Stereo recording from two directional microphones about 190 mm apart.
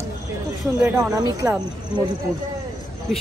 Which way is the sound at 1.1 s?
15° right (ahead or behind).